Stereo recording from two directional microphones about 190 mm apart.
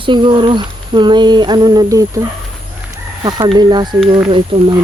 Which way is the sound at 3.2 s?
20° right (ahead or behind).